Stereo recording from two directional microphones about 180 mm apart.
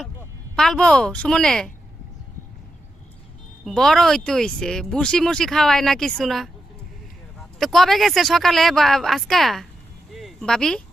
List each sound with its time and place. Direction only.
0.5 s speech: centre (ahead or behind)
3.6 s speech: centre (ahead or behind)
10.2 s a sound: centre (ahead or behind)